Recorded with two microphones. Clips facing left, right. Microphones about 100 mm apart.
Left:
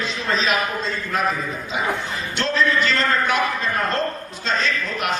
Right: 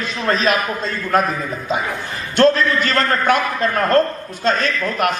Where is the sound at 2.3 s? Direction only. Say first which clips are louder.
Right 7 dB; 50° right (ahead or behind).